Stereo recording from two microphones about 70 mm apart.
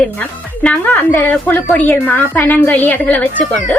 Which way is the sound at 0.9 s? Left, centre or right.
Left.